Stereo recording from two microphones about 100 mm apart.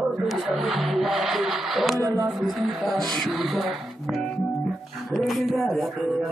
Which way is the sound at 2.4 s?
Centre (ahead or behind).